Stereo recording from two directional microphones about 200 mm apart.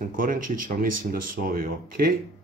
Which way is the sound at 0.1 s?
45° right (ahead or behind).